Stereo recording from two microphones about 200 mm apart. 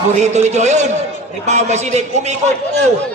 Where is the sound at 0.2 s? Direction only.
35° right (ahead or behind).